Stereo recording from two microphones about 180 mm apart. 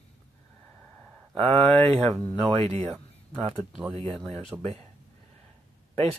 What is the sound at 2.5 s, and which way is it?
Speech, 35° right (ahead or behind).